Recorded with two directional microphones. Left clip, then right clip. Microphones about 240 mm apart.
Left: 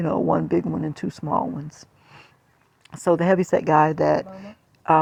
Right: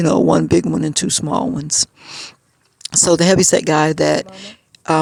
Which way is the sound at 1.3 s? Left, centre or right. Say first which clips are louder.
Right 2 dB; right.